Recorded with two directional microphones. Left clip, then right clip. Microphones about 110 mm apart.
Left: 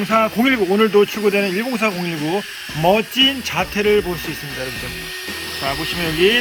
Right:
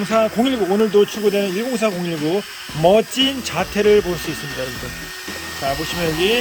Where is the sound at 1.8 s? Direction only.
10° right (ahead or behind).